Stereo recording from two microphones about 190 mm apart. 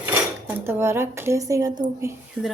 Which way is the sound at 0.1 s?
10° right (ahead or behind).